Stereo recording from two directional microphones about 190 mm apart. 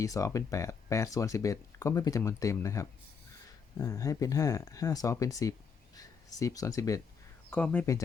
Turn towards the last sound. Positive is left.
turn(degrees=10)  # may be behind; listen again after turning